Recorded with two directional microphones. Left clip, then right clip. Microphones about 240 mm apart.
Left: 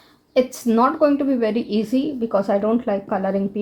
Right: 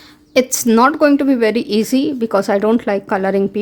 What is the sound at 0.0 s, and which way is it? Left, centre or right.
A woman's voice, right.